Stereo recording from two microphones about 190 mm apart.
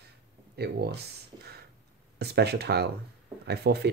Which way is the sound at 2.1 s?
60° right (ahead or behind).